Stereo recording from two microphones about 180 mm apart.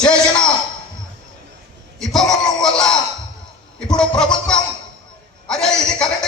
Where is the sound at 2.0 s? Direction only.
Centre (ahead or behind).